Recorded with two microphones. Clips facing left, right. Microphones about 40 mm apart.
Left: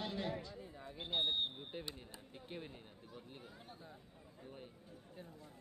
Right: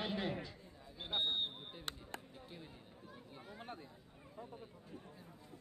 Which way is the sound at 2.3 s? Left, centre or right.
Left.